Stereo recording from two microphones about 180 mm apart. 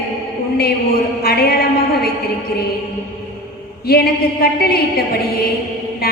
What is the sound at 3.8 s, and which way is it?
A woman's voice, 60° left (ahead or behind).